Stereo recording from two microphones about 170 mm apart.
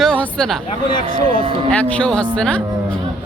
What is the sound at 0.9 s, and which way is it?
Speech, 30° left (ahead or behind).